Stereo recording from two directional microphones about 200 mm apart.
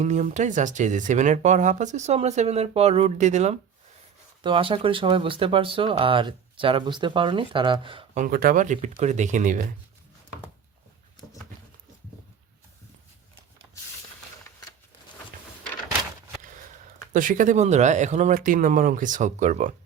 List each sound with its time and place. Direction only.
0.0 s speech: 35° right (ahead or behind)
8.2 s speech: 45° right (ahead or behind)
17.1 s speech: 40° right (ahead or behind)